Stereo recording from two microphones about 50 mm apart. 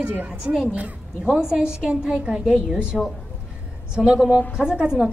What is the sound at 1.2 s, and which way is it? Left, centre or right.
A woman's voice, centre.